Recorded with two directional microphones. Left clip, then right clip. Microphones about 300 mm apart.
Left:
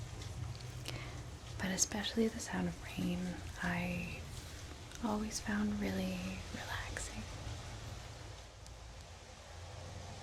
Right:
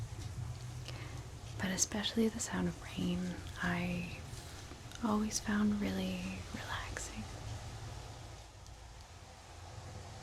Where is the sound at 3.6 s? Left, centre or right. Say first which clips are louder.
Right 1 dB; centre.